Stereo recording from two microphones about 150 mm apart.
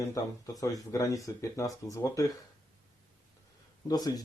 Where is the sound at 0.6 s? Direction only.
20° left (ahead or behind).